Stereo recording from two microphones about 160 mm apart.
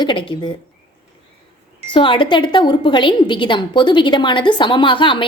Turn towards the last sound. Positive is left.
turn(degrees=30)  # may be behind; listen again after turning